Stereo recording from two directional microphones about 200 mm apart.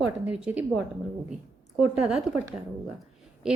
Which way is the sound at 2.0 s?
Centre (ahead or behind).